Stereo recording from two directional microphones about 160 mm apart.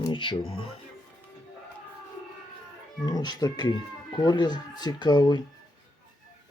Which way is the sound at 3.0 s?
25° left (ahead or behind).